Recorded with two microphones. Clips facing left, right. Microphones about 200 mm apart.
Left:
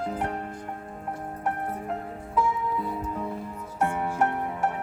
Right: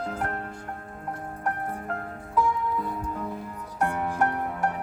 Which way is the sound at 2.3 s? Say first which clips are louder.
Right 1 dB; 5° left (ahead or behind).